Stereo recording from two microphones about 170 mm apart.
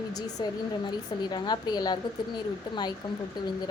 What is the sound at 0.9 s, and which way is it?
A woman's voice, 25° left (ahead or behind).